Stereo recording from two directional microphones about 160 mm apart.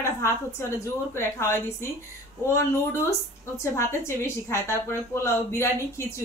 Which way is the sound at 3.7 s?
15° left (ahead or behind).